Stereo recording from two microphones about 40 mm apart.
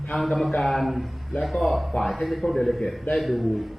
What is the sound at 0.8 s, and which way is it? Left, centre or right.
A man's voice, centre.